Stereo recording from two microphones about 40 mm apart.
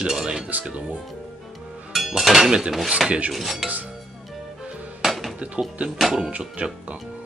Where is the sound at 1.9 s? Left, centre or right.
Centre.